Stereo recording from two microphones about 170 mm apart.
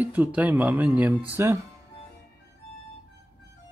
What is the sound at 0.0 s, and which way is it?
Speech, 10° right (ahead or behind).